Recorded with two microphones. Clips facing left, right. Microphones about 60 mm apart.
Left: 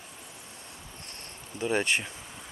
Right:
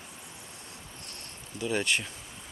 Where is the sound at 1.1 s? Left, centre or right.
Left.